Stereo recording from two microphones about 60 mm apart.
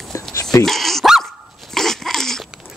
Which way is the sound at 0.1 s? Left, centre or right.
Left.